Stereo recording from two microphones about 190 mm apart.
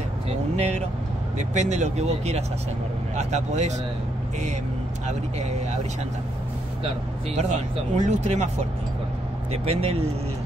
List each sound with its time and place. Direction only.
1.5 s speech: 35° right (ahead or behind)
7.3 s speech: 35° right (ahead or behind)
9.5 s speech: 30° right (ahead or behind)